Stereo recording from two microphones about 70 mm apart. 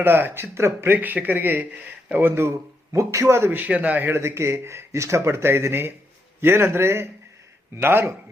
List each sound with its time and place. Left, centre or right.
0.0 s speech: right
0.9 s speech: right
3.6 s speech: right
4.1 s speech: right